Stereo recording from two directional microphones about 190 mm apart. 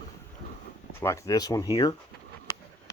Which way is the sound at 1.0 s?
15° left (ahead or behind).